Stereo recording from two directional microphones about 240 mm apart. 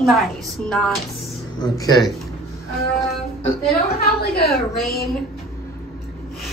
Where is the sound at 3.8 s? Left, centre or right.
Left.